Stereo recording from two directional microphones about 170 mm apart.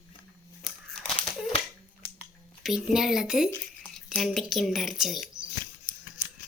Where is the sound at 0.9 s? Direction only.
Centre (ahead or behind).